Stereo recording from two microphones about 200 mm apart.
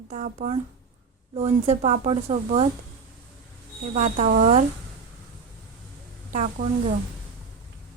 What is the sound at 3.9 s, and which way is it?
Speech, 35° right (ahead or behind).